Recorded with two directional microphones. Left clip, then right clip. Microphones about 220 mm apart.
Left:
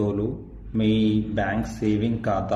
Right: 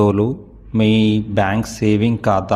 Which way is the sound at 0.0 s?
45° right (ahead or behind).